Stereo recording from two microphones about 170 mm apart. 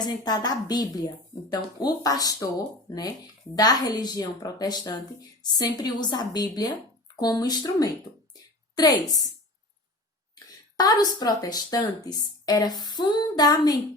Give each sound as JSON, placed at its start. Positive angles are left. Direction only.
{"t": 0.0, "sound": "speech", "side_deg": 25}
{"t": 3.5, "sound": "speech", "side_deg": 25}
{"t": 10.8, "sound": "speech", "side_deg": 25}